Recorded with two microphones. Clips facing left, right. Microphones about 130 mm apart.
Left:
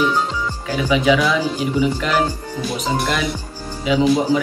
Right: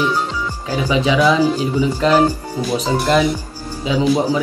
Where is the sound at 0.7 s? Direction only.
35° right (ahead or behind).